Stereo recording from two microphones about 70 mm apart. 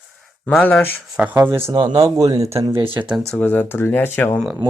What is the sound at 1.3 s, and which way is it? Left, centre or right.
Speech, right.